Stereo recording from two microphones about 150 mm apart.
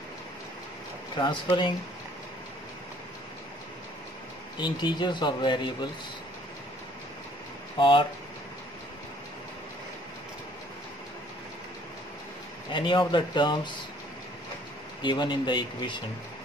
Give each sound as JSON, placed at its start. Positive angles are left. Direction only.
{"t": 1.1, "sound": "speech", "side_deg": 30}
{"t": 4.6, "sound": "speech", "side_deg": 30}
{"t": 7.7, "sound": "speech", "side_deg": 35}
{"t": 12.7, "sound": "speech", "side_deg": 30}
{"t": 15.0, "sound": "speech", "side_deg": 30}